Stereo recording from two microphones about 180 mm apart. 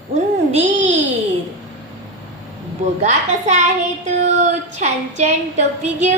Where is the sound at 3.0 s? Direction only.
40° right (ahead or behind).